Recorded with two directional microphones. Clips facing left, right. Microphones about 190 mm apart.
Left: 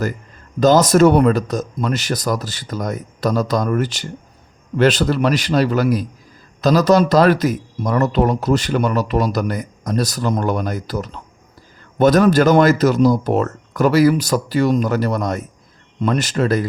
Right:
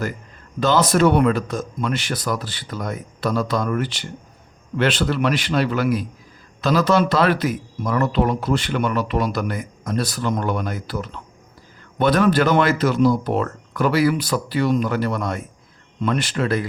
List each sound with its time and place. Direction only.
0.6 s speech: 40° left (ahead or behind)